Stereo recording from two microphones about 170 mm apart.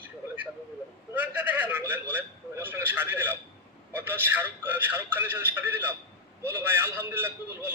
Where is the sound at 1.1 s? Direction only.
10° right (ahead or behind).